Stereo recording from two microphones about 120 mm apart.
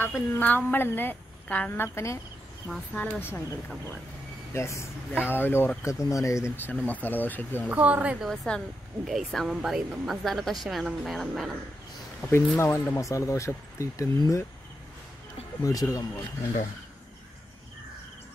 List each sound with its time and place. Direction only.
0.0 s a woman's voice: 20° left (ahead or behind)
2.7 s a woman's voice: 10° left (ahead or behind)
4.6 s a woman's voice: 25° left (ahead or behind)
7.7 s speech: 10° right (ahead or behind)
8.3 s speech: 5° left (ahead or behind)
12.3 s speech: 20° left (ahead or behind)
15.6 s speech: 30° left (ahead or behind)